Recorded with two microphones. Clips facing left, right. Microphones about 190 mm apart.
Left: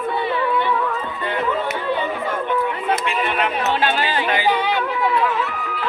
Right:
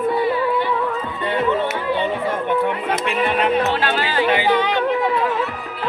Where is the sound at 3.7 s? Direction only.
15° left (ahead or behind).